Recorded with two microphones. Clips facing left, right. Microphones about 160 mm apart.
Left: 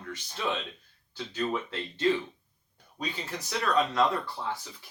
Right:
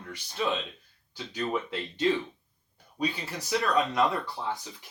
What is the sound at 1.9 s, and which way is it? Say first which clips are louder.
Speech: even; 20° right (ahead or behind).